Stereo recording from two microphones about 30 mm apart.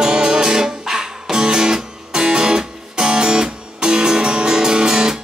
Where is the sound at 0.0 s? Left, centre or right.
Right.